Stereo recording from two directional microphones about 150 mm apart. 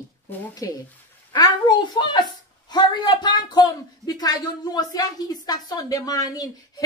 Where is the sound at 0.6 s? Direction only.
20° left (ahead or behind).